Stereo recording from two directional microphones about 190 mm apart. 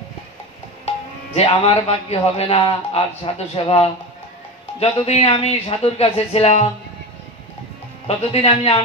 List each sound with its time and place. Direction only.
0.8 s a man's voice: 35° left (ahead or behind)
8.2 s speech: 30° left (ahead or behind)